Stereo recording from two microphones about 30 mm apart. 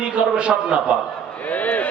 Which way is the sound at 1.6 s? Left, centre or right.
Left.